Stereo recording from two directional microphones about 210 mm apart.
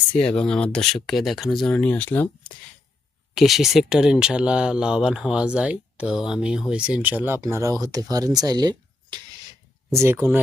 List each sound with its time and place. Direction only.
0.1 s speech: 5° left (ahead or behind)
3.3 s speech: centre (ahead or behind)